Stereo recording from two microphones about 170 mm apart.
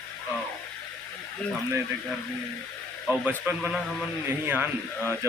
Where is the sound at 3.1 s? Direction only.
10° right (ahead or behind).